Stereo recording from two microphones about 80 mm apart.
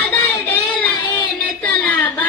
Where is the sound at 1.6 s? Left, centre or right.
Centre.